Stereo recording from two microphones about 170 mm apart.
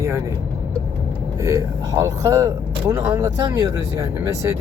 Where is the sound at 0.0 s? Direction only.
15° right (ahead or behind).